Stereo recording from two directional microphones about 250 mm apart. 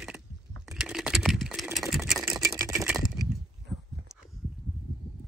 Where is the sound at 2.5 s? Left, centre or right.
Centre.